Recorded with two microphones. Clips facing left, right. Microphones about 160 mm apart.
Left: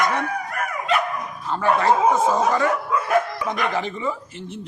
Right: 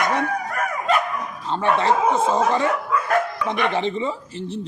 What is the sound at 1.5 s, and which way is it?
Speech, 25° right (ahead or behind).